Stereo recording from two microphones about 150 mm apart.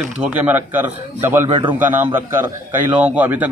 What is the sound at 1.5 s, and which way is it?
Speech, 35° right (ahead or behind).